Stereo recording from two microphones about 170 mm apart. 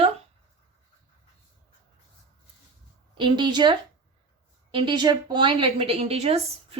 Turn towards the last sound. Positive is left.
turn(degrees=-35)  # may be behind; listen again after turning